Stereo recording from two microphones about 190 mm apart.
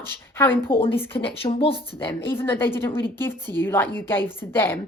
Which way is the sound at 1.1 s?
30° left (ahead or behind).